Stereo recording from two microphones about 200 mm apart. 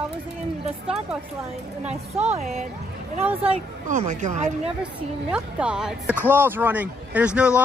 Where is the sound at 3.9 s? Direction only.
35° right (ahead or behind).